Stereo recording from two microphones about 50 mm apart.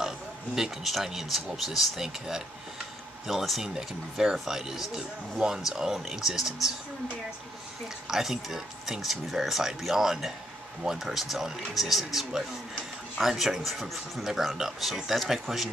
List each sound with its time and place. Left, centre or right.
0.6 s speech: centre
8.1 s speech: centre